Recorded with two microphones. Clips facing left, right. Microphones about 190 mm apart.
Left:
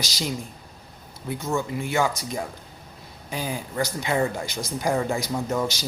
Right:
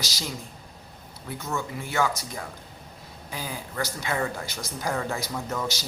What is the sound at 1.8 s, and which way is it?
Speech, 15° left (ahead or behind).